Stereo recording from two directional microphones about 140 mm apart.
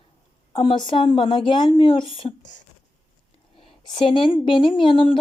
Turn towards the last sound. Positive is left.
turn(degrees=40)  # may be behind; listen again after turning